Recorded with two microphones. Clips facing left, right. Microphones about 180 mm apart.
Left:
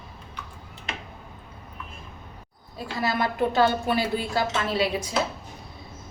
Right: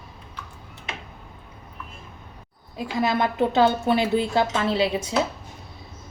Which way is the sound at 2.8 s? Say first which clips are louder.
Right 4 dB; 20° right (ahead or behind).